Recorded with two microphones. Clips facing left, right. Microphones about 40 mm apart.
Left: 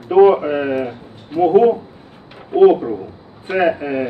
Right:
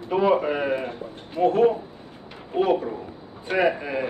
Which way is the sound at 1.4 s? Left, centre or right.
Centre.